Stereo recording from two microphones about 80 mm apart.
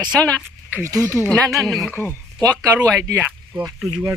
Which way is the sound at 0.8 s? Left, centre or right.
Right.